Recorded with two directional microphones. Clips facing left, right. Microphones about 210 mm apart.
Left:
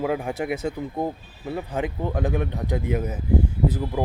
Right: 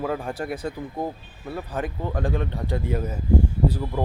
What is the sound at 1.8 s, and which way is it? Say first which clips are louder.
Speech: left 2 dB; 15° left (ahead or behind).